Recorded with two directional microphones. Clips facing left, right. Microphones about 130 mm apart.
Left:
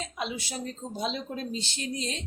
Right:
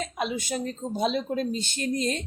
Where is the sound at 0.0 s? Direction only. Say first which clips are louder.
Right 5 dB; 50° right (ahead or behind).